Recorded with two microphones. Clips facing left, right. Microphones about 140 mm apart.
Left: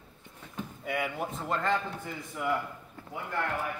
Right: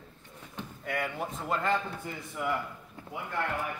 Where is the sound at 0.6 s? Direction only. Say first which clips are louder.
Left 1 dB; 5° left (ahead or behind).